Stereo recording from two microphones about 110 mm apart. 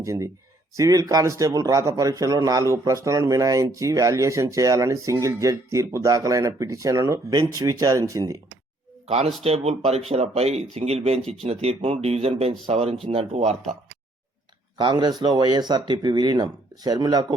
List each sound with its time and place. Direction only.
0.0 s a man's voice: 30° right (ahead or behind)
9.0 s speech: 70° right (ahead or behind)
14.8 s a man's voice: 45° right (ahead or behind)